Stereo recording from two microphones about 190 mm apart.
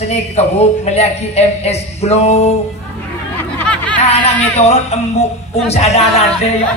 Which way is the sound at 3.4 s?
5° left (ahead or behind).